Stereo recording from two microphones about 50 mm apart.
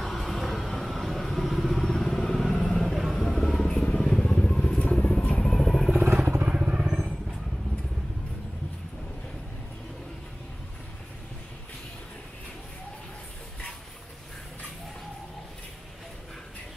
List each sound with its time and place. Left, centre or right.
0.0 s vehicle: centre; by 5.5 s left
5.5 s vehicle: centre
6.1 s vehicle: right
6.5 s vehicle: centre